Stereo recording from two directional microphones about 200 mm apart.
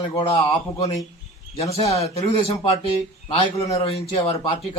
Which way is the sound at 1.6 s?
30° left (ahead or behind).